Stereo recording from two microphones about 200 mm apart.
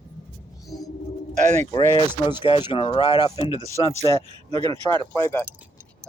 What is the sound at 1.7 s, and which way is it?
Speech, 25° left (ahead or behind).